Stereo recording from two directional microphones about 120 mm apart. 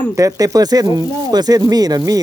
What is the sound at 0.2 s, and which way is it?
Speech, 30° right (ahead or behind).